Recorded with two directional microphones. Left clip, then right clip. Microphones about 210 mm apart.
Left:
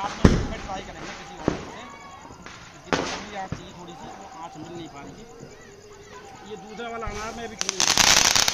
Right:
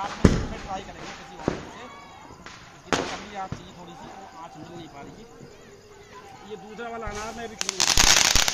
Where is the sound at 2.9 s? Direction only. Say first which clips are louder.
Even; 55° right (ahead or behind).